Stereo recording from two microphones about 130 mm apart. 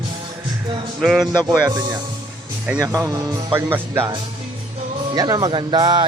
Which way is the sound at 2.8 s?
25° right (ahead or behind).